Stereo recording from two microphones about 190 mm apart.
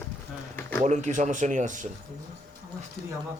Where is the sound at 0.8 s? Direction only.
40° right (ahead or behind).